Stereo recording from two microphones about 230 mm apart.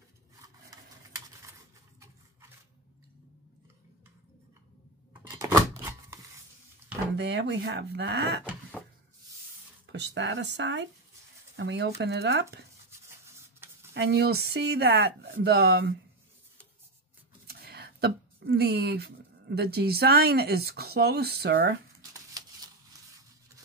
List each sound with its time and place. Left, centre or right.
0.7 s a sound: centre
5.3 s scissors: centre
7.2 s speech: right
9.8 s speech: right
13.0 s rub: centre
13.9 s speech: right
17.5 s speech: right